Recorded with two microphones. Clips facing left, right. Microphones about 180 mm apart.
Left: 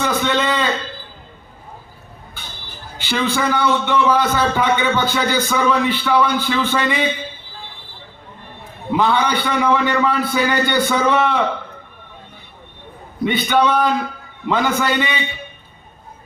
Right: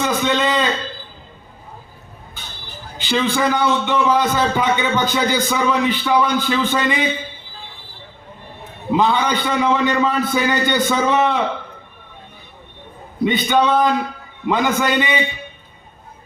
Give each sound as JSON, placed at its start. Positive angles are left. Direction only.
{"t": 0.0, "sound": "a sound", "side_deg": -20}
{"t": 3.0, "sound": "a man's voice", "side_deg": -15}
{"t": 8.9, "sound": "a man's voice", "side_deg": -20}
{"t": 13.2, "sound": "a man's voice", "side_deg": -20}